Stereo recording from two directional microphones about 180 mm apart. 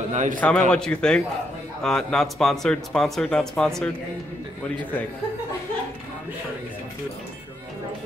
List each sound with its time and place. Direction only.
0.1 s a man's voice: 45° right (ahead or behind)
0.4 s speech: 5° left (ahead or behind)